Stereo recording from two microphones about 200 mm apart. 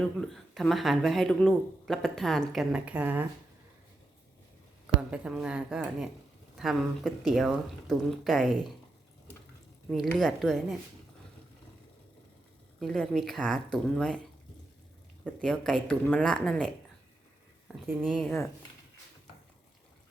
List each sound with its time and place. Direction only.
0.2 s speech: centre (ahead or behind)
4.9 s speech: 5° right (ahead or behind)
10.1 s speech: 5° left (ahead or behind)
12.8 s speech: centre (ahead or behind)
15.2 s speech: 5° left (ahead or behind)
17.7 s speech: 5° right (ahead or behind)